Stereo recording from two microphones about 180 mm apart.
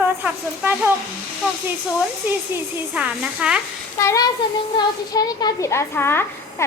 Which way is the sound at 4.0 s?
15° left (ahead or behind).